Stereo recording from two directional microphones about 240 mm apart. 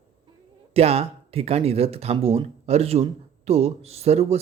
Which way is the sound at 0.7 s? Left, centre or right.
Right.